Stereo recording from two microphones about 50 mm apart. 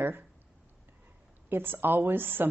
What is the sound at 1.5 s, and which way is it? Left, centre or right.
Speech, right.